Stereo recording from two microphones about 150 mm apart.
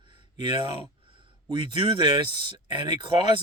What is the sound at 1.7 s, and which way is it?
Speech, 30° right (ahead or behind).